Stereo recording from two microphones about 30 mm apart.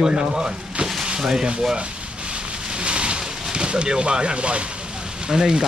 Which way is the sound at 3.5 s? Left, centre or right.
Right.